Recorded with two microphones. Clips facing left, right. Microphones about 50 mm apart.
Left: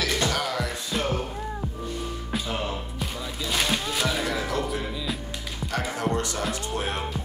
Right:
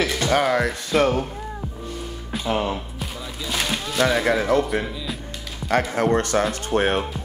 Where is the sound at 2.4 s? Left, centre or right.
Right.